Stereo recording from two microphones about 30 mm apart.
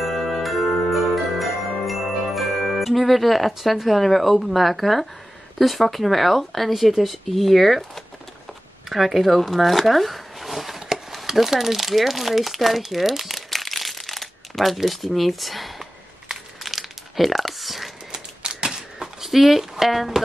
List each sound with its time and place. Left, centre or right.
0.0 s jingle bell: centre
3.7 s speech: centre
12.5 s crumpling: centre
14.8 s speech: centre
16.3 s crumpling: centre
18.4 s typewriter: right
19.2 s speech: centre